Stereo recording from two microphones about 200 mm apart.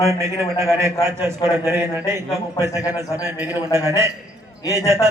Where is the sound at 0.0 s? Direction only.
15° right (ahead or behind).